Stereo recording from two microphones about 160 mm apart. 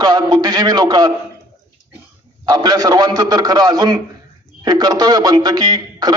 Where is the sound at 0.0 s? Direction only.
25° right (ahead or behind).